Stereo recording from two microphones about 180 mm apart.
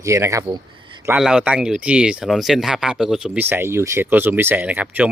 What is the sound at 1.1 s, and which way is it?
Speech, 5° right (ahead or behind).